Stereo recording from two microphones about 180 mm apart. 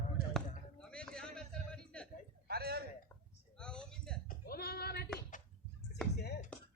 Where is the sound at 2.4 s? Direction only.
60° right (ahead or behind).